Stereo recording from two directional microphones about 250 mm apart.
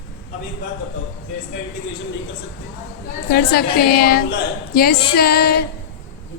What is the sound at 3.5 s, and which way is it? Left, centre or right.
A woman's voice, left.